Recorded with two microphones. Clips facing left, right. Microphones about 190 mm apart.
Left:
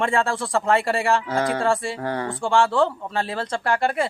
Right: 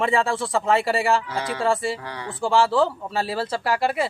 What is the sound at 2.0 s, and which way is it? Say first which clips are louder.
Speech: left 8 dB; 50° left (ahead or behind).